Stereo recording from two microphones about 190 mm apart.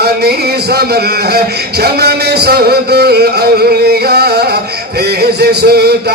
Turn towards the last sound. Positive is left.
turn(degrees=-55)  # may be behind; listen again after turning